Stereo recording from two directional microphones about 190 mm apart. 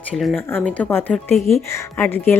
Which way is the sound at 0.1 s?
Centre (ahead or behind).